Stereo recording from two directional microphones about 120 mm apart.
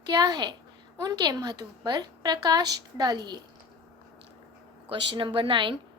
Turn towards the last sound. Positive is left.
turn(degrees=-45)  # may be behind; listen again after turning